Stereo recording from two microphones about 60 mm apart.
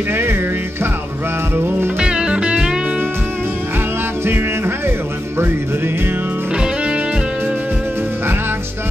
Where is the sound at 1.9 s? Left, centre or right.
Centre.